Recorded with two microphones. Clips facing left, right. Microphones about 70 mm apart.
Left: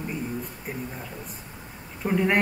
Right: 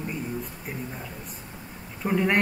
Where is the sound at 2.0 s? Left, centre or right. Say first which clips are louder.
Left 1 dB; centre.